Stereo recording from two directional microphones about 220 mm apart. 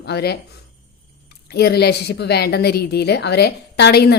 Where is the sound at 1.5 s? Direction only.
45° left (ahead or behind).